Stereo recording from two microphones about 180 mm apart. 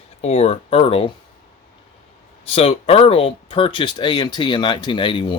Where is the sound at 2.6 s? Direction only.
35° left (ahead or behind).